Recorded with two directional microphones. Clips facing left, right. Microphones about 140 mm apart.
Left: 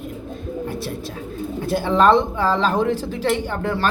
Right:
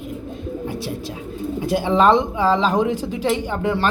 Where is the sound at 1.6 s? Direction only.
15° right (ahead or behind).